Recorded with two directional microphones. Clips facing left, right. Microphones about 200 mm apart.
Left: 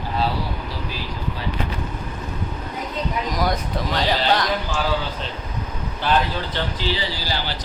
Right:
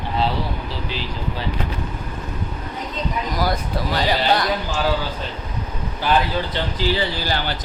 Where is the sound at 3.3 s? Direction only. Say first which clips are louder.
Right 1 dB; 5° right (ahead or behind).